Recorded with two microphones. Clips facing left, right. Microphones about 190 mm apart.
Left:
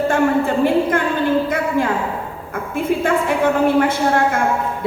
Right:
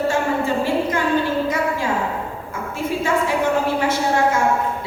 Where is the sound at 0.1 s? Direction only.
55° left (ahead or behind).